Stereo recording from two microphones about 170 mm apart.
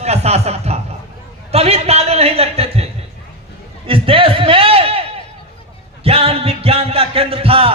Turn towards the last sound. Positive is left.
turn(degrees=-35)  # may be behind; listen again after turning